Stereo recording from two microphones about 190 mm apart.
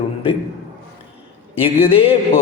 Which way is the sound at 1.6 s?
30° left (ahead or behind).